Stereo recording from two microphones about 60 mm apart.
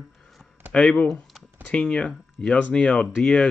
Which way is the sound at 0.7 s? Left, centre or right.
Centre.